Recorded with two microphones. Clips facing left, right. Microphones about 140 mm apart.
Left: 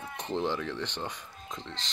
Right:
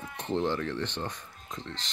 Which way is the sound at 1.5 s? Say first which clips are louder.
Right 1 dB; 10° right (ahead or behind).